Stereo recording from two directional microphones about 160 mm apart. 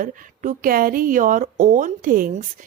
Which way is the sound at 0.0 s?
60° right (ahead or behind).